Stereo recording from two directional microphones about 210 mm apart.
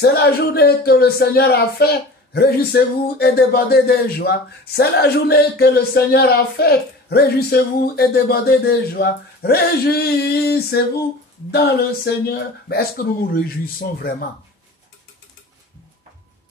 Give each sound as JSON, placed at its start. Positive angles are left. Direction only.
{"t": 0.0, "sound": "speech", "side_deg": 50}